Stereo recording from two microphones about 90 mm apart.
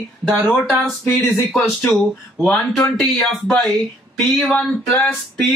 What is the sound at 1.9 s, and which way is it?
Speech, 10° left (ahead or behind).